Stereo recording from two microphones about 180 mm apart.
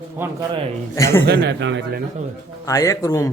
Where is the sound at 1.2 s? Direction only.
70° right (ahead or behind); by 2.0 s 85° right.